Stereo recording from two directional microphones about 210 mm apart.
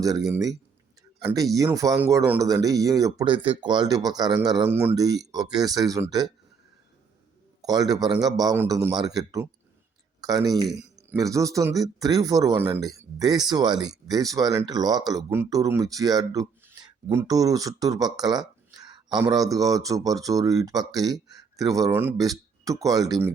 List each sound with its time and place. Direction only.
1.5 s speech: 15° right (ahead or behind)
7.6 s speech: 20° right (ahead or behind)